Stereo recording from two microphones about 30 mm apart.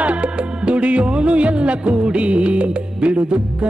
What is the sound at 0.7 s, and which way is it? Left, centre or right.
Music, right.